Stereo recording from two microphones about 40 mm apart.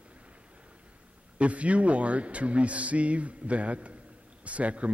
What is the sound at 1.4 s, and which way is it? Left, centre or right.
A man's voice, right.